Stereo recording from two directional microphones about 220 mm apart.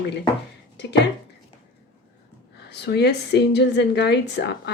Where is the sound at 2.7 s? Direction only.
50° left (ahead or behind).